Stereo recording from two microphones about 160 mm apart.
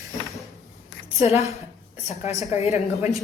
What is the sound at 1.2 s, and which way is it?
Speech, 40° left (ahead or behind).